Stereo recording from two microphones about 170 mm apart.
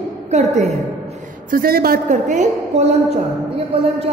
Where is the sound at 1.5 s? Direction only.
60° right (ahead or behind).